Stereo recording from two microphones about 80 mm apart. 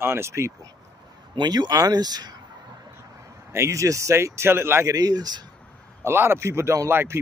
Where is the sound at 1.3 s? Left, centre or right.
Right.